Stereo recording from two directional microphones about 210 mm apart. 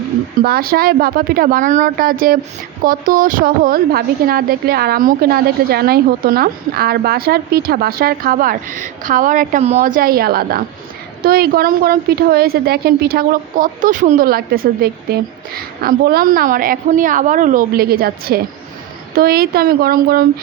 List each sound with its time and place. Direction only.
0.4 s a woman's voice: 45° right (ahead or behind)